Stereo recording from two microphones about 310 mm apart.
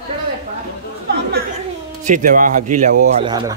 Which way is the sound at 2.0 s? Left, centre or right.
Right.